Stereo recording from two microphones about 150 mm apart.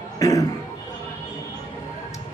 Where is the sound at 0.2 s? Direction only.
20° left (ahead or behind).